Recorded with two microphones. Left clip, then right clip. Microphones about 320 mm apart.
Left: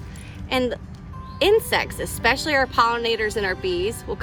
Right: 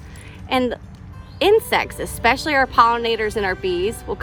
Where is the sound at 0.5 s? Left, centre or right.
Right.